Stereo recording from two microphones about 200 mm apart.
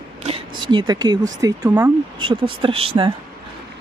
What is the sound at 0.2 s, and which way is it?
Speech, 30° right (ahead or behind).